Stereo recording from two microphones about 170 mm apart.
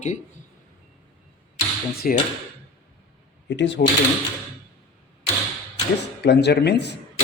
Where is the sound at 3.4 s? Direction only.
90° left.